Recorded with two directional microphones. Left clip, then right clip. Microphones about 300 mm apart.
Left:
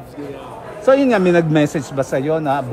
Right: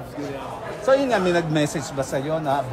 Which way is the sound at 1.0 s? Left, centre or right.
Left.